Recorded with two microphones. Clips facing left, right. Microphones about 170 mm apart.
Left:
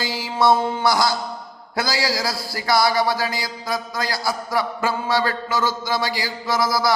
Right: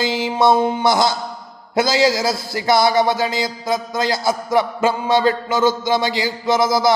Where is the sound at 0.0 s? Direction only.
20° right (ahead or behind).